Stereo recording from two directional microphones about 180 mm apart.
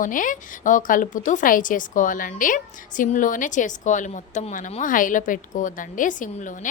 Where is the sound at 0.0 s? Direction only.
45° left (ahead or behind).